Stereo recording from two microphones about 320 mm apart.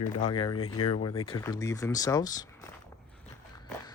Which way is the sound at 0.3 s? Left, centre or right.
Centre.